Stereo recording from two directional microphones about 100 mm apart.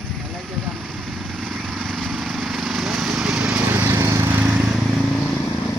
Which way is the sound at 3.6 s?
25° right (ahead or behind).